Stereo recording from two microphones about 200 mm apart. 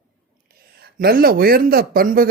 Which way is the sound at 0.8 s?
50° right (ahead or behind).